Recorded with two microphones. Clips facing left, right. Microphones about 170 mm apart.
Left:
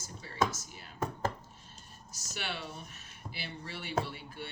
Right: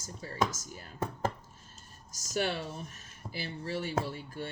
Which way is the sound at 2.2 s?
45° right (ahead or behind).